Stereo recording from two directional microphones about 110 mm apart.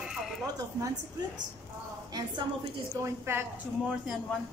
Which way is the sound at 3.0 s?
25° right (ahead or behind).